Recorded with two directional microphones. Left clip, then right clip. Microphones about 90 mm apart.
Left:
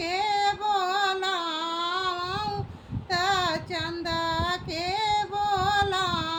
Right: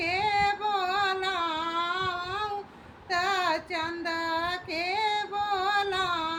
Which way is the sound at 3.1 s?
25° left (ahead or behind).